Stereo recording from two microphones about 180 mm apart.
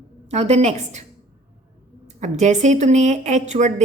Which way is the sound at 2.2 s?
40° right (ahead or behind).